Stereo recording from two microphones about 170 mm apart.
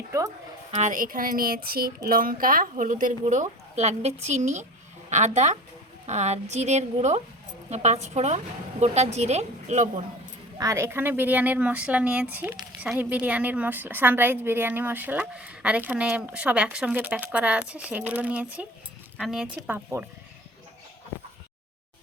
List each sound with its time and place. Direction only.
0.7 s a woman's voice: 45° right (ahead or behind)
10.6 s speech: 15° right (ahead or behind)